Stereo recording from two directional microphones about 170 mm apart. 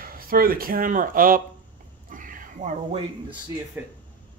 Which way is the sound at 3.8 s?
10° right (ahead or behind).